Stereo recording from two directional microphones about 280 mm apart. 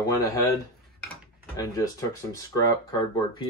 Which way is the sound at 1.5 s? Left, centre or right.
Centre.